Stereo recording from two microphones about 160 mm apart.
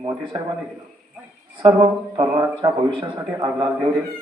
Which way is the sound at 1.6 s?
30° right (ahead or behind).